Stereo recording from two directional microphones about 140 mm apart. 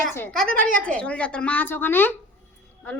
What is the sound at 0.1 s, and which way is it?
A woman's voice, 15° left (ahead or behind).